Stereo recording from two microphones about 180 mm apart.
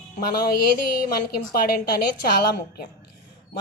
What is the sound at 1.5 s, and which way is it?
Speech, 55° left (ahead or behind).